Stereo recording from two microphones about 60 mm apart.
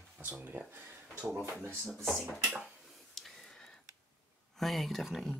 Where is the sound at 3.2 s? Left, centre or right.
Centre.